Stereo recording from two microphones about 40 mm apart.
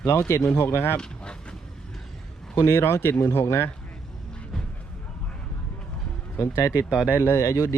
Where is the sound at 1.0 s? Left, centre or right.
Left.